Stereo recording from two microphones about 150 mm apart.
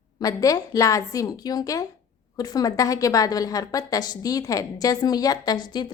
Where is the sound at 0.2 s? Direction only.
25° left (ahead or behind).